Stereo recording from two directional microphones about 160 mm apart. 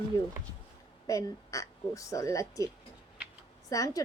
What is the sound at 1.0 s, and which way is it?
A woman's voice, 20° left (ahead or behind).